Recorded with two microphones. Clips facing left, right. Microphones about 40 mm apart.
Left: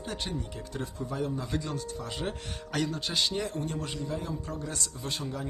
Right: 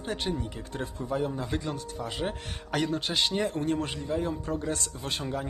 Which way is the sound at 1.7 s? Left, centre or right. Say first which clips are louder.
Right 1 dB; centre.